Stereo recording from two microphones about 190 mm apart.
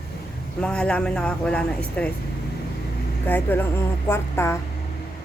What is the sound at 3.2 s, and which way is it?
A woman's voice, 10° left (ahead or behind).